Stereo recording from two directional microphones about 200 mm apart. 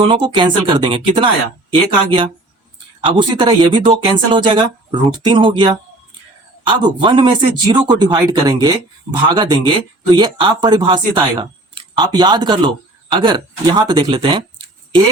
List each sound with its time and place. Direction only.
0.1 s speech: 25° right (ahead or behind)